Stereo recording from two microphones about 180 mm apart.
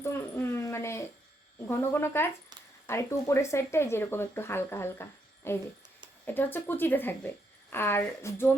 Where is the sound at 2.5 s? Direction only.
25° right (ahead or behind).